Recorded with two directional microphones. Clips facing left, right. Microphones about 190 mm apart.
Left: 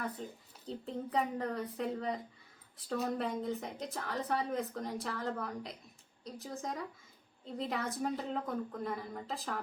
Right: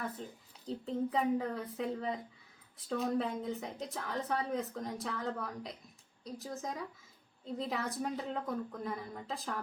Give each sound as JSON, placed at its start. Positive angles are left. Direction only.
{"t": 0.6, "sound": "a woman's voice", "side_deg": 0}